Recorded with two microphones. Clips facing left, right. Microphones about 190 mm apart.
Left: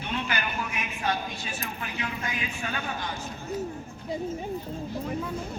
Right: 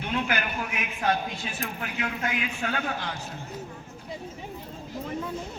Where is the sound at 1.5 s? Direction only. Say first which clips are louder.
Right 2 dB; 65° right (ahead or behind).